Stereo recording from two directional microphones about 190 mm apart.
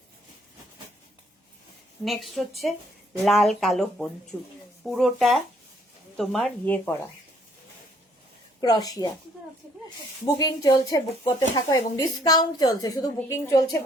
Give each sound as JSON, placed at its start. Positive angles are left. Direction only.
{"t": 2.0, "sound": "speech", "side_deg": 0}
{"t": 8.6, "sound": "a woman's voice", "side_deg": 20}
{"t": 10.3, "sound": "a woman's voice", "side_deg": 20}